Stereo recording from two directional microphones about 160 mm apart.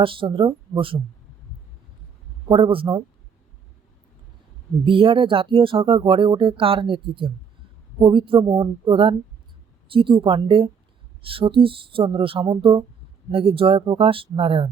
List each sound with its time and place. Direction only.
0.0 s speech: 30° right (ahead or behind)
2.5 s speech: 30° right (ahead or behind)
4.9 s speech: 35° right (ahead or behind)